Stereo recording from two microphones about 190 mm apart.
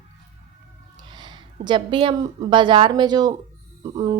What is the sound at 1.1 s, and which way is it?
A woman's voice, 25° right (ahead or behind).